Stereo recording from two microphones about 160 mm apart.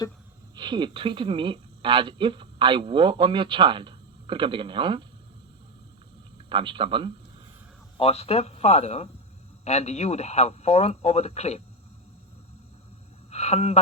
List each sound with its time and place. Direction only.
0.5 s speech: 30° right (ahead or behind)
6.5 s speech: 30° right (ahead or behind)
7.9 s speech: 40° left (ahead or behind)
13.3 s speech: 40° left (ahead or behind)